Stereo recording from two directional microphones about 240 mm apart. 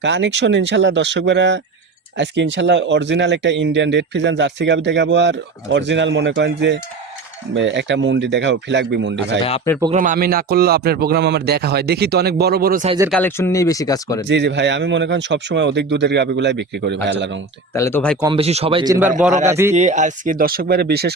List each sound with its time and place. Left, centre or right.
0.0 s speech: right
9.9 s a man's voice: right
13.1 s speech: centre
14.3 s speech: right
17.7 s speech: centre
18.2 s speech: right
19.5 s a man's voice: centre
19.7 s a man's voice: right